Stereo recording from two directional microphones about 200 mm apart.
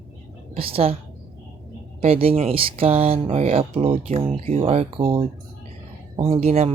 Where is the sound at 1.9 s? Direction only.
30° right (ahead or behind).